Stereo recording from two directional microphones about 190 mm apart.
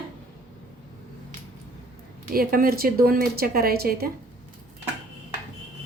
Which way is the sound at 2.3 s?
50° right (ahead or behind).